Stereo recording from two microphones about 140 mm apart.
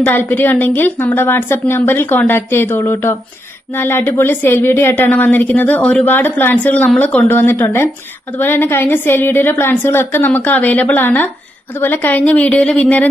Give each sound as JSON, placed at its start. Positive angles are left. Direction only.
{"t": 0.0, "sound": "a woman's voice", "side_deg": 15}